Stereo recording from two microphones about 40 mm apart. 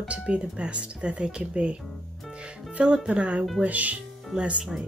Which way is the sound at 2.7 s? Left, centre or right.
Right.